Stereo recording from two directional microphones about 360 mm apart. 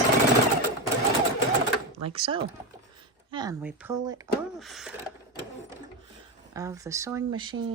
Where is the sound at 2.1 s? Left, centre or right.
Centre.